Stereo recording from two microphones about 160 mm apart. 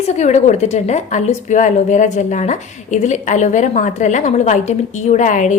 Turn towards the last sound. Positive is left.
turn(degrees=50)  # may be behind; listen again after turning